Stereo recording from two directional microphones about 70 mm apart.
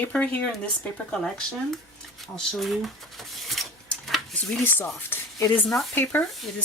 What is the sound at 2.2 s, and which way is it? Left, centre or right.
Speech, centre.